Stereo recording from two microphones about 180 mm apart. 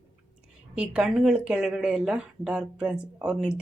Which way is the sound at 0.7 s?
5° right (ahead or behind).